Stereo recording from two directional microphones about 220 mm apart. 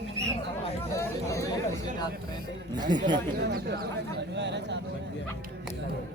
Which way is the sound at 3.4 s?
45° right (ahead or behind).